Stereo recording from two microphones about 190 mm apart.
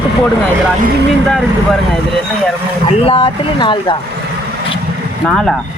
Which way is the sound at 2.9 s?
30° left (ahead or behind).